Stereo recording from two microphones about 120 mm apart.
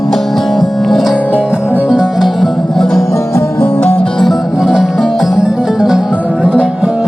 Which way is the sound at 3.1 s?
25° left (ahead or behind).